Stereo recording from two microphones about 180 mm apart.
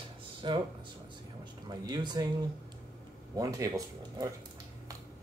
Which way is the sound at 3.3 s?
20° right (ahead or behind).